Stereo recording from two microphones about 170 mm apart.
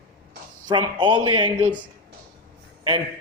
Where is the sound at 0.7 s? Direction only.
25° right (ahead or behind).